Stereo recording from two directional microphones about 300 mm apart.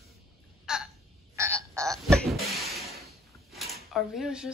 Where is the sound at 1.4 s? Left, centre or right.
Centre.